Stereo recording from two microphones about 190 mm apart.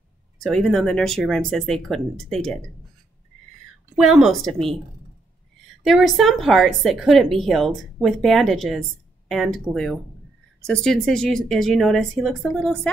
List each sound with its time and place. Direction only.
0.4 s a woman's voice: centre (ahead or behind)
4.0 s a woman's voice: centre (ahead or behind)
5.9 s a woman's voice: centre (ahead or behind)